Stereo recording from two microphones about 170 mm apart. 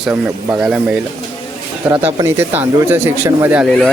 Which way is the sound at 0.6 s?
5° right (ahead or behind).